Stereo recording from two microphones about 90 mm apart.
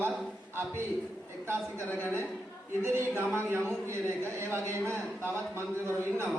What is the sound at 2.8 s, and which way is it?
Speech, 30° right (ahead or behind).